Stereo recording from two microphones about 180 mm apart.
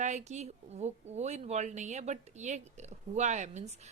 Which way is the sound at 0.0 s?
40° right (ahead or behind).